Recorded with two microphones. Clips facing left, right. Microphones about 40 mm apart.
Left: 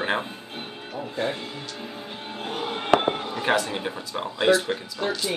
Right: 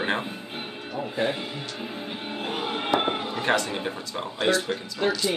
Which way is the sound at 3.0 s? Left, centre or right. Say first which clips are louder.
Left 1 dB; centre.